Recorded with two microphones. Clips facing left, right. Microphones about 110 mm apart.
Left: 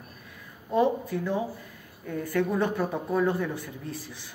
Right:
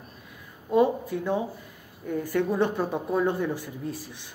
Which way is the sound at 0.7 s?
20° right (ahead or behind).